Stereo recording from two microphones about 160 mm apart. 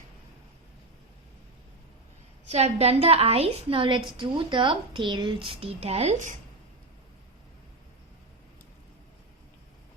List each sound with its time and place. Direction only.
2.5 s a woman's voice: 40° right (ahead or behind)